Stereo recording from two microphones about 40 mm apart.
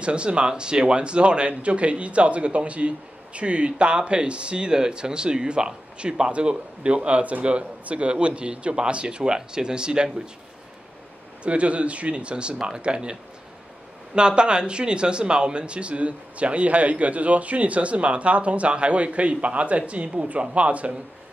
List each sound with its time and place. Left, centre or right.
0.0 s speech: right
11.4 s speech: right